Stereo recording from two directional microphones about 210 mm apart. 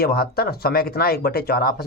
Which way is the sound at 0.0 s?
45° left (ahead or behind).